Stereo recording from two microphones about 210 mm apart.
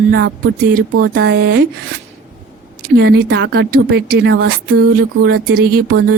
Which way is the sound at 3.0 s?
55° right (ahead or behind).